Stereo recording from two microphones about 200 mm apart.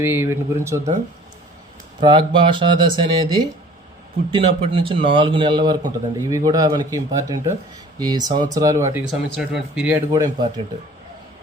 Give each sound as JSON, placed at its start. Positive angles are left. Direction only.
{"t": 0.0, "sound": "speech", "side_deg": -10}
{"t": 2.0, "sound": "a man's voice", "side_deg": -25}
{"t": 10.1, "sound": "a man's voice", "side_deg": -20}